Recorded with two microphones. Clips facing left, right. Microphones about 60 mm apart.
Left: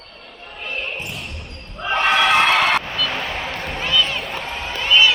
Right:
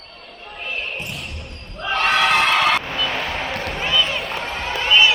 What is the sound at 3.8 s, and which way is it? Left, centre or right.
Run, centre.